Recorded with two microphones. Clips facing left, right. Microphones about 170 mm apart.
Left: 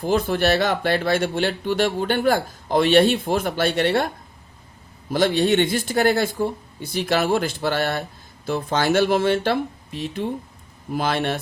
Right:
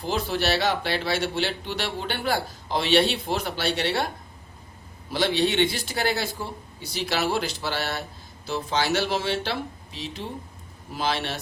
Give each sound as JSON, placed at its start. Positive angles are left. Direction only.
{"t": 0.0, "sound": "speech", "side_deg": 50}
{"t": 5.1, "sound": "speech", "side_deg": 45}